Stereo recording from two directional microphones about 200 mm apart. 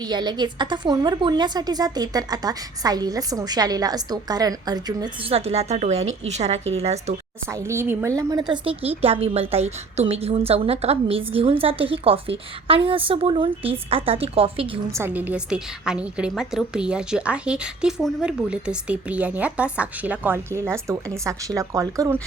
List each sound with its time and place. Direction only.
0.0 s a woman's voice: 20° right (ahead or behind)
7.5 s a woman's voice: 15° right (ahead or behind); by 14.7 s 30° right (ahead or behind)
14.9 s a woman's voice: 10° right (ahead or behind)